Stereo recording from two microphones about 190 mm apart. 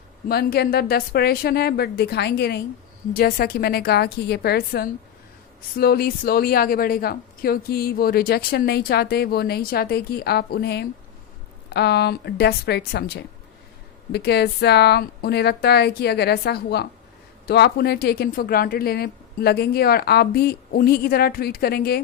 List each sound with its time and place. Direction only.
0.3 s a woman's voice: 55° left (ahead or behind)